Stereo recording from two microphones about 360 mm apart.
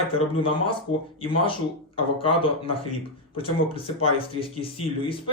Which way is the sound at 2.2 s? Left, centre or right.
Centre.